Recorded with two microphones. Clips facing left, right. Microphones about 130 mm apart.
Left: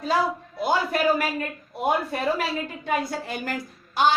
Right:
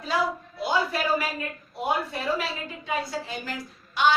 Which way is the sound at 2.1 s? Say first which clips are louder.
Left 3 dB; 50° left (ahead or behind).